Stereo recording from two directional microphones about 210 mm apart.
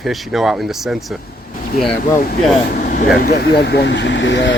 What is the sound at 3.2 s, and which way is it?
Speech, 50° left (ahead or behind).